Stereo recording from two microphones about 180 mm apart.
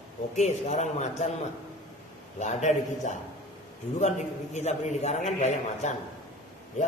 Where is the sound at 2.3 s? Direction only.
40° left (ahead or behind).